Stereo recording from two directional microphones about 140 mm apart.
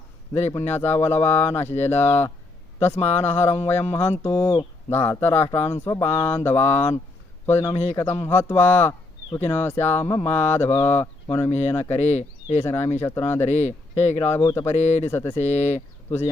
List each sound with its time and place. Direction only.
0.5 s speech: 15° left (ahead or behind)
2.9 s speech: 50° left (ahead or behind)
3.2 s speech: 20° left (ahead or behind)
11.9 s speech: 50° left (ahead or behind)
12.6 s speech: 15° left (ahead or behind)
13.5 s speech: 55° left (ahead or behind)
14.3 s speech: 15° left (ahead or behind)
14.7 s speech: 50° left (ahead or behind)
15.1 s speech: 20° left (ahead or behind)
15.4 s speech: 50° left (ahead or behind)